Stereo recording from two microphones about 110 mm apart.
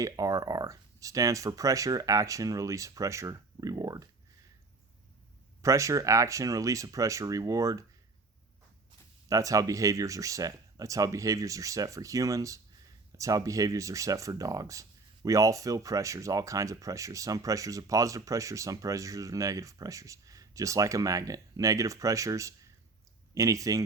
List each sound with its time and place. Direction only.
0.0 s speech: 30° right (ahead or behind)
5.6 s speech: 30° right (ahead or behind)
9.3 s speech: 30° right (ahead or behind)